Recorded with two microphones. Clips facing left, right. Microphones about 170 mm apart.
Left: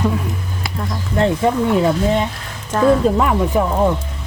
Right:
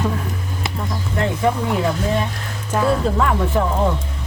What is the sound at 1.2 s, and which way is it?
Speech, 25° left (ahead or behind).